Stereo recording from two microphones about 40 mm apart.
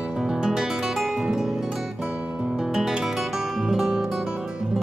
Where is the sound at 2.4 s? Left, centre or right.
Centre.